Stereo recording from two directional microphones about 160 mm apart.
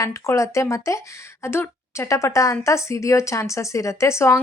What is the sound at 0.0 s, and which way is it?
A woman's voice, 20° left (ahead or behind).